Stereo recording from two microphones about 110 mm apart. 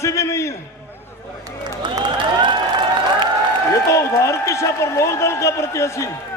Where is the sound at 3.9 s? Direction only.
25° left (ahead or behind).